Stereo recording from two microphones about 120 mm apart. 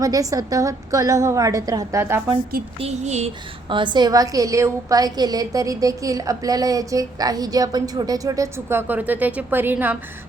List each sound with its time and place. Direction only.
0.0 s a woman's voice: 30° right (ahead or behind)
2.8 s a sound: 65° right (ahead or behind)
3.7 s a woman's voice: 40° right (ahead or behind); by 10.0 s 15° right (ahead or behind)